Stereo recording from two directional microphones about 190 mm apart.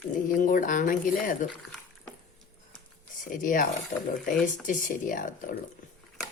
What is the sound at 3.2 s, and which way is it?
Speech, 45° left (ahead or behind).